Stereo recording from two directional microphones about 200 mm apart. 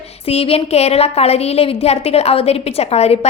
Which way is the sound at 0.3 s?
30° left (ahead or behind).